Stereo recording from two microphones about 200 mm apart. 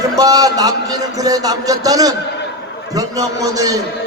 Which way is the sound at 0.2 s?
20° right (ahead or behind).